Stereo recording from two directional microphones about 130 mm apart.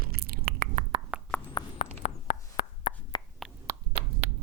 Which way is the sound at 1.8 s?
70° left (ahead or behind).